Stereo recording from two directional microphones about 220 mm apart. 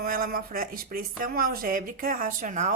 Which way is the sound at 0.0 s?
40° right (ahead or behind).